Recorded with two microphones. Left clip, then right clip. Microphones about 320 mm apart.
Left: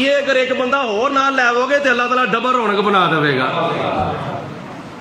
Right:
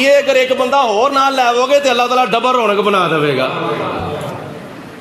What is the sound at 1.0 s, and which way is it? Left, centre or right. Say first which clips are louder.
A man's voice: right 3 dB; centre.